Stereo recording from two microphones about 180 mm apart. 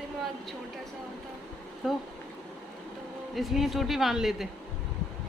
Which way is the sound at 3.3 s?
Centre (ahead or behind).